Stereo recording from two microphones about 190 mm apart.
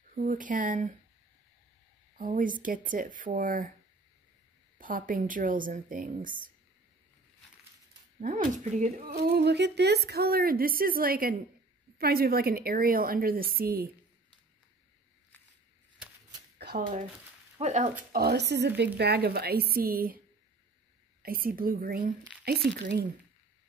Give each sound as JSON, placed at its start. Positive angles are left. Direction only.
{"t": 0.1, "sound": "a woman's voice", "side_deg": -45}
{"t": 2.1, "sound": "a woman's voice", "side_deg": -45}
{"t": 4.7, "sound": "a woman's voice", "side_deg": -45}
{"t": 8.2, "sound": "a woman's voice", "side_deg": -45}
{"t": 9.1, "sound": "a woman's voice", "side_deg": -55}
{"t": 16.5, "sound": "a sound", "side_deg": -55}
{"t": 17.6, "sound": "speech", "side_deg": -40}
{"t": 18.1, "sound": "a woman's voice", "side_deg": -60}
{"t": 21.2, "sound": "a woman's voice", "side_deg": -50}